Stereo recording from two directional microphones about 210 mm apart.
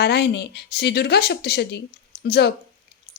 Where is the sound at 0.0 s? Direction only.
55° left (ahead or behind).